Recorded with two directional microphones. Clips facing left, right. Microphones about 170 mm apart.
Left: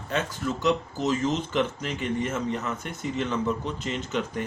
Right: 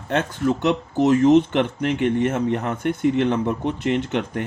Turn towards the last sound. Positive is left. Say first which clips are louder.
# right 5 dB
turn(degrees=-60)  # may be behind; listen again after turning